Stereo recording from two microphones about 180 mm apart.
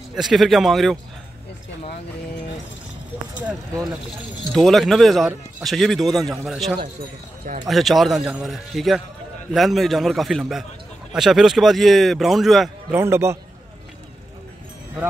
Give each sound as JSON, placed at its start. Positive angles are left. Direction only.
{"t": 0.1, "sound": "a man's voice", "side_deg": 0}
{"t": 4.5, "sound": "a man's voice", "side_deg": 0}
{"t": 12.9, "sound": "a man's voice", "side_deg": -15}